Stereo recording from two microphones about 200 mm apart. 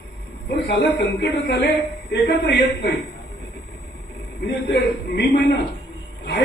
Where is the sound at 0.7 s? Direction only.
55° left (ahead or behind).